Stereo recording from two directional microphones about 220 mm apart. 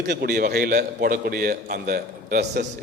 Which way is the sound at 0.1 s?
45° right (ahead or behind).